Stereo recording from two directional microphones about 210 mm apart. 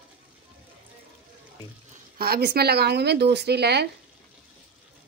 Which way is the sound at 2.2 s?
50° right (ahead or behind).